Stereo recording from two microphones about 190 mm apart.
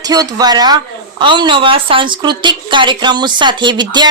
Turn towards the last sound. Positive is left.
turn(degrees=-25)  # may be behind; listen again after turning